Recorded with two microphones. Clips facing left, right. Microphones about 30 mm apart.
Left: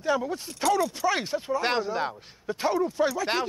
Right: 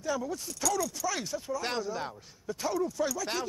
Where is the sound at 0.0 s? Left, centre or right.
Left.